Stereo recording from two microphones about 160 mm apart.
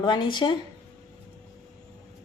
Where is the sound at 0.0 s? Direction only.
30° left (ahead or behind).